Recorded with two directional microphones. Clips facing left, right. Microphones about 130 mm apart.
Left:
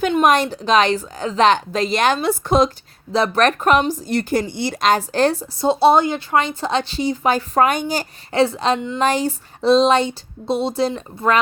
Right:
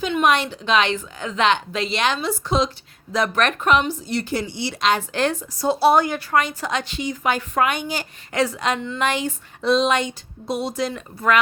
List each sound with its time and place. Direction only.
0.1 s speech: 40° left (ahead or behind)
3.1 s speech: 30° left (ahead or behind)